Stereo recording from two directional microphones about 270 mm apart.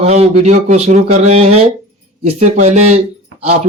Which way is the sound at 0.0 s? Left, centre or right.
Right.